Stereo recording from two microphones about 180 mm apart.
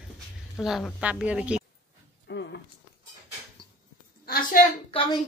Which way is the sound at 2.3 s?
70° left (ahead or behind).